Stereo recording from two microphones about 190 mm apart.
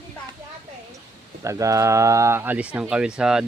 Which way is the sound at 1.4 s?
15° right (ahead or behind).